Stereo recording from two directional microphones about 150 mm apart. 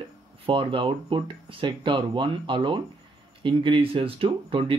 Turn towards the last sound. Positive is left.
turn(degrees=-35)  # may be behind; listen again after turning